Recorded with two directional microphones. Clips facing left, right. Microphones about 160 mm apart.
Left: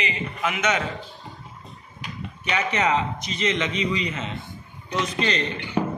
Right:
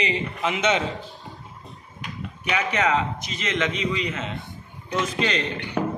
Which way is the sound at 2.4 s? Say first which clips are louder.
Even; 5° right (ahead or behind).